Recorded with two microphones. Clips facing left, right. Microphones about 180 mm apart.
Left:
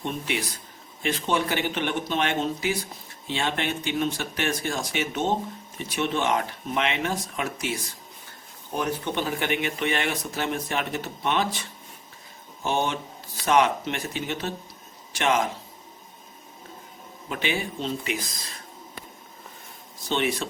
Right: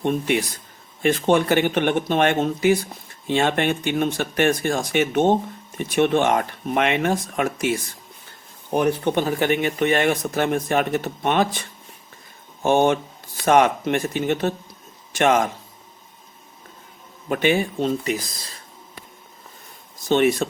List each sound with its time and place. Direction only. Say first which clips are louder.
0.0 s speech: right 8 dB; 50° right (ahead or behind)
12.6 s speech: right 9 dB; 50° right (ahead or behind)
17.2 s speech: right 9 dB; 50° right (ahead or behind)
20.1 s speech: right 8 dB; 45° right (ahead or behind)